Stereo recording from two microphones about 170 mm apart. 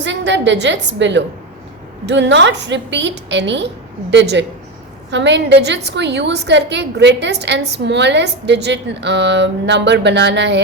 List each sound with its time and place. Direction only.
0.0 s a woman's voice: 90° right